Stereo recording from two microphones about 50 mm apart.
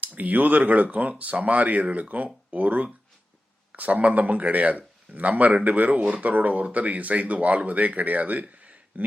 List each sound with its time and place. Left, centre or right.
0.0 s speech: right